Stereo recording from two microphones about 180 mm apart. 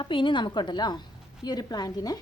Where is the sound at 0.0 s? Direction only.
25° left (ahead or behind).